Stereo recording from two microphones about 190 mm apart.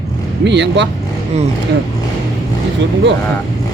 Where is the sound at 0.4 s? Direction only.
65° right (ahead or behind).